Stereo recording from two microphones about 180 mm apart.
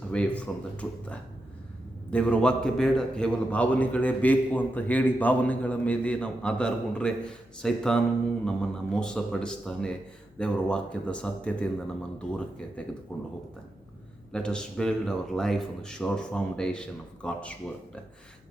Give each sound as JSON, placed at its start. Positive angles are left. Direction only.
{"t": 0.1, "sound": "a man's voice", "side_deg": 5}
{"t": 13.1, "sound": "speech", "side_deg": 5}
{"t": 14.3, "sound": "a man's voice", "side_deg": 5}